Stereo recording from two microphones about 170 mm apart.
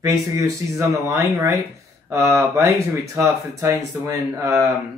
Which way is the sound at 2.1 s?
15° right (ahead or behind).